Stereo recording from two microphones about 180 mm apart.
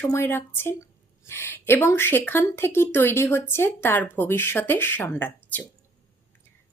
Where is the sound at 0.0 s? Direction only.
10° left (ahead or behind).